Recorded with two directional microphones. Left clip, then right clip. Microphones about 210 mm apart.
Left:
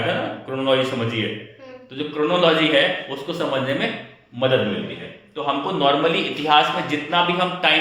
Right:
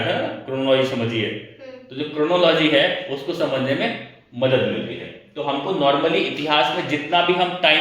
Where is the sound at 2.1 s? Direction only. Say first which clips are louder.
Right 1 dB; 15° left (ahead or behind).